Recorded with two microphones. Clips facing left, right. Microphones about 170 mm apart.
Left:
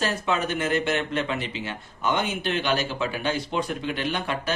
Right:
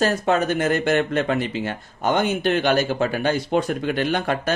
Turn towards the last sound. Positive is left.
turn(degrees=-50)  # may be behind; listen again after turning